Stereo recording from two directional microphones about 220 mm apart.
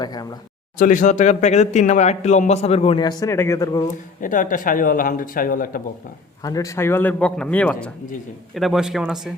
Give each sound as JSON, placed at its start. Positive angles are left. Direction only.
{"t": 0.0, "sound": "a man's voice", "side_deg": 15}
{"t": 0.8, "sound": "speech", "side_deg": 35}
{"t": 3.8, "sound": "speech", "side_deg": 35}
{"t": 6.4, "sound": "a man's voice", "side_deg": 15}